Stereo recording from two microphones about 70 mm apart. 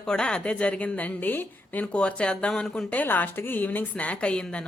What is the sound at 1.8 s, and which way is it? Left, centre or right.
A woman's voice, centre.